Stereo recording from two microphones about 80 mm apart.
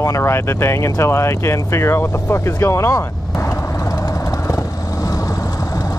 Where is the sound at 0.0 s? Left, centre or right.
Left.